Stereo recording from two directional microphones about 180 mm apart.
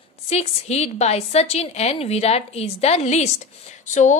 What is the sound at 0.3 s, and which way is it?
A woman's voice, 35° left (ahead or behind).